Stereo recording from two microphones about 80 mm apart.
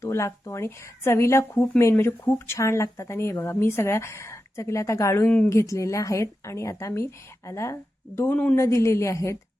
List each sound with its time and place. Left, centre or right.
0.0 s speech: left
8.3 s speech: centre
8.5 s speech: left